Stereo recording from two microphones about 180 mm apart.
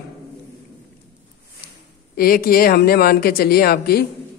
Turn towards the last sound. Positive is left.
turn(degrees=60)  # may be behind; listen again after turning